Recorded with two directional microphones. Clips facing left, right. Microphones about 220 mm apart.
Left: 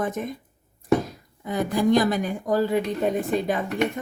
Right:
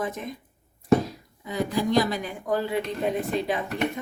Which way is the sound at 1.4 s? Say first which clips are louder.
Left 4 dB; 50° left (ahead or behind).